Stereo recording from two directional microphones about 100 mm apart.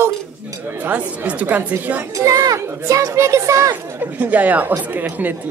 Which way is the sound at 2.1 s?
35° right (ahead or behind).